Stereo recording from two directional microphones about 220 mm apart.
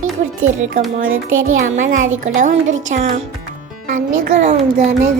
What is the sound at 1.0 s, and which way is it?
Speech, 65° right (ahead or behind).